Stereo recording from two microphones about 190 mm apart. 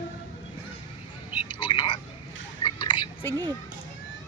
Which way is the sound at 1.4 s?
25° left (ahead or behind).